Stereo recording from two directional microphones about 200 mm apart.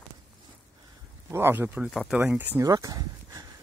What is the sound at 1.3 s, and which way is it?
Speech, 10° right (ahead or behind).